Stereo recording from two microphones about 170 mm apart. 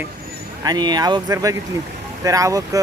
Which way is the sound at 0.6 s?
25° right (ahead or behind).